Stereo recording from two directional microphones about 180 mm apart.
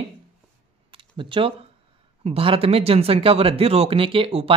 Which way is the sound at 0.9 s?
30° right (ahead or behind).